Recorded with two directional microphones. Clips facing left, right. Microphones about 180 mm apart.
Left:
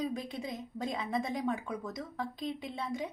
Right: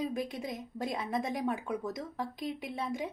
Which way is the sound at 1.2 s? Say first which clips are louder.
Right 1 dB; 10° right (ahead or behind).